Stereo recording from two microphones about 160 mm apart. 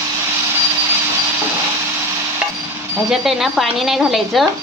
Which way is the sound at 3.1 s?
Centre (ahead or behind).